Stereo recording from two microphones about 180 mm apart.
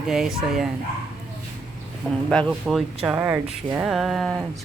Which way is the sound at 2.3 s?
5° left (ahead or behind).